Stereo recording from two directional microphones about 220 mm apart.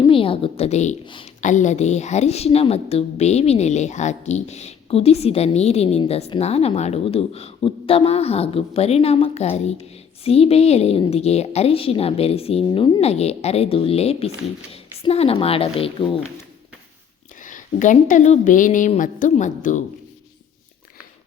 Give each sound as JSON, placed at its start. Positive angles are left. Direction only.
{"t": 0.1, "sound": "a woman's voice", "side_deg": 25}
{"t": 1.4, "sound": "a woman's voice", "side_deg": 35}
{"t": 17.4, "sound": "a woman's voice", "side_deg": 35}